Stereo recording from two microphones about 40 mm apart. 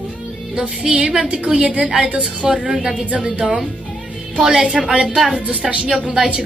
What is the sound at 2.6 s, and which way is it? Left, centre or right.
Speech, centre.